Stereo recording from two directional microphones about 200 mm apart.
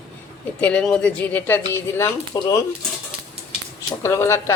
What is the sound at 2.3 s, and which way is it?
Speech, 20° left (ahead or behind).